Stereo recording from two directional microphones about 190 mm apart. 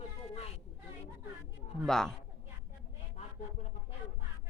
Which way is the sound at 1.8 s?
5° left (ahead or behind).